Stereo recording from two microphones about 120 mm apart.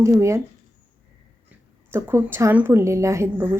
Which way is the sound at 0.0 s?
25° right (ahead or behind).